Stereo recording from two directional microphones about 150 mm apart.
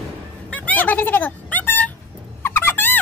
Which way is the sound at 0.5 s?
10° left (ahead or behind).